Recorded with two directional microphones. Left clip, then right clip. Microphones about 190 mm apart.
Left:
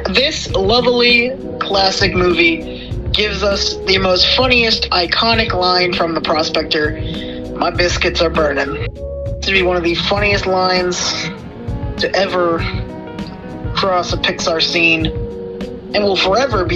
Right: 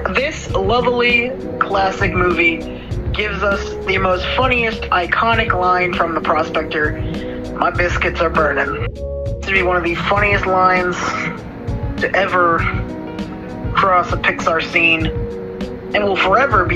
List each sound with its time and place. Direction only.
0.0 s a woman's voice: 45° left (ahead or behind)
13.7 s a woman's voice: 40° left (ahead or behind)